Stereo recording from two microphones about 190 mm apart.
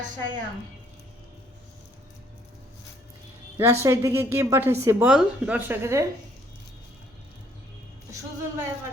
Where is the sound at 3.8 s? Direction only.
15° right (ahead or behind).